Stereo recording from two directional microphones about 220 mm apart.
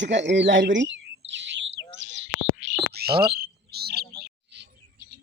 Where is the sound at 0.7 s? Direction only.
55° right (ahead or behind).